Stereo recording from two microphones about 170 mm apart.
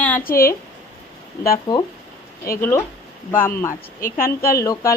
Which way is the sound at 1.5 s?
25° left (ahead or behind).